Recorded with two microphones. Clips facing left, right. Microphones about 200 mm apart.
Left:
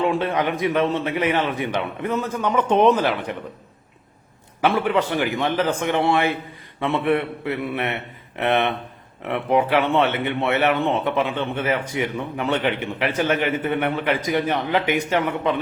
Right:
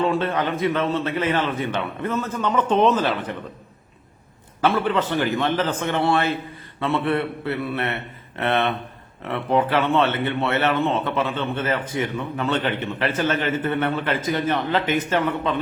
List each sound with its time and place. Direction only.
0.0 s speech: 15° left (ahead or behind)
4.6 s speech: 15° left (ahead or behind)